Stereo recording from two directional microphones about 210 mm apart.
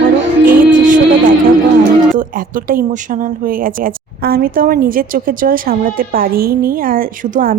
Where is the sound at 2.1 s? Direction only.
40° right (ahead or behind).